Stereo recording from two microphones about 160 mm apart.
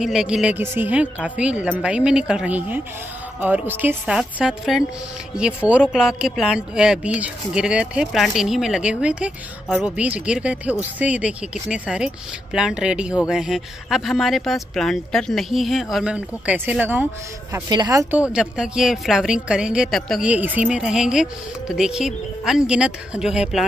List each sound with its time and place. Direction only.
0.0 s speech: 5° right (ahead or behind)
17.6 s speech: 25° right (ahead or behind)
18.3 s speech: 5° right (ahead or behind)